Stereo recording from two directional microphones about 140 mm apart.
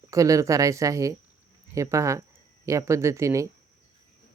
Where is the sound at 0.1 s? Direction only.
20° right (ahead or behind).